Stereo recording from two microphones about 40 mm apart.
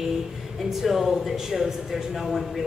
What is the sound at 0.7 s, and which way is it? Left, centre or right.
A woman's voice, centre.